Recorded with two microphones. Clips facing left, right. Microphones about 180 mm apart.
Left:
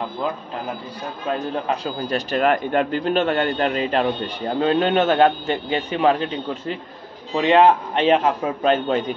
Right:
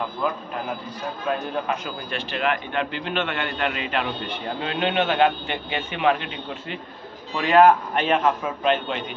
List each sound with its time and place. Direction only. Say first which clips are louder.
1.7 s a man's voice: left 5 dB; 40° left (ahead or behind)
7.3 s a man's voice: left 1 dB; 25° left (ahead or behind)